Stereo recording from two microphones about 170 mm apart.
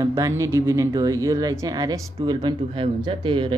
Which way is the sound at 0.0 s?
20° right (ahead or behind).